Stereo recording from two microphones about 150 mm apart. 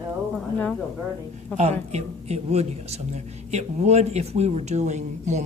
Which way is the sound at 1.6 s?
50° right (ahead or behind).